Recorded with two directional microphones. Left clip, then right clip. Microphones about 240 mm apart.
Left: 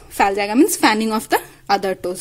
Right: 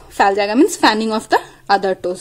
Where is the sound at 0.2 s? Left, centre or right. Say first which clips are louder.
Right 2 dB; left.